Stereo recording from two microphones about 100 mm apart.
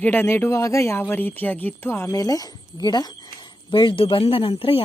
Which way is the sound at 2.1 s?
35° left (ahead or behind).